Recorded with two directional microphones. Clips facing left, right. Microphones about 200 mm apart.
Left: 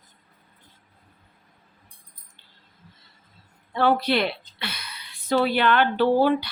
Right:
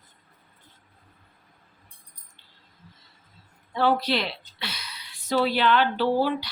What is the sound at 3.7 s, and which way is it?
A woman's voice, 55° left (ahead or behind).